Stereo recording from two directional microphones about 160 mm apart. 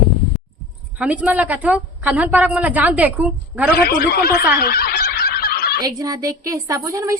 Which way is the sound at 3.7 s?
80° left.